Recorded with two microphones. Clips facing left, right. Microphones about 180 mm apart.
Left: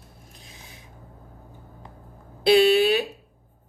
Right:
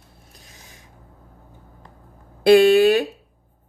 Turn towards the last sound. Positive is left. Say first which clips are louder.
# right 4 dB
turn(degrees=-50)  # may be behind; listen again after turning